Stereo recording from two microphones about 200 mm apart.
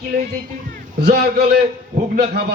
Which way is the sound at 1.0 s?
55° right (ahead or behind).